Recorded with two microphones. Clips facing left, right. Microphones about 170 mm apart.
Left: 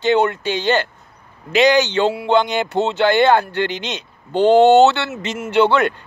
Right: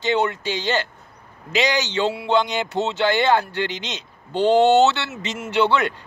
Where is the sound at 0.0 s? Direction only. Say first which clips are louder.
Left 5 dB; 55° left (ahead or behind).